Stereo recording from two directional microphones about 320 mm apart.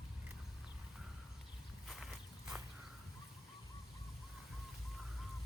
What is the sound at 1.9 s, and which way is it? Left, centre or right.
Walk, centre.